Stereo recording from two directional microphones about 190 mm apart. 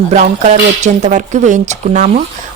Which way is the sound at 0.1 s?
40° right (ahead or behind).